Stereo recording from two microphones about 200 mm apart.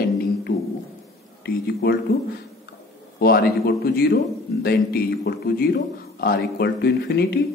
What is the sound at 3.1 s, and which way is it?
A man's voice, 50° left (ahead or behind).